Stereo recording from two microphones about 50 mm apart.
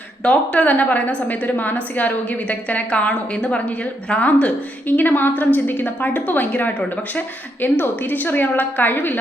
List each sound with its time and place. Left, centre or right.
0.2 s a woman's voice: left